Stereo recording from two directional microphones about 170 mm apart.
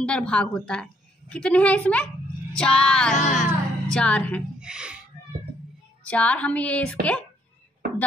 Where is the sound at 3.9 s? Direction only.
5° left (ahead or behind).